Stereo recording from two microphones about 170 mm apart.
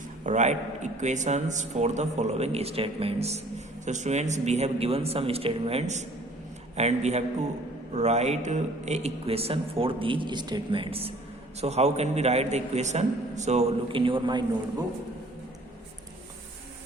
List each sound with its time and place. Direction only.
0.3 s a man's voice: 45° right (ahead or behind); by 14.4 s 30° right (ahead or behind)